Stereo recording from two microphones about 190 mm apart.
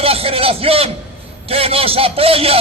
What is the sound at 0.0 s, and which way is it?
A man's voice, 30° right (ahead or behind).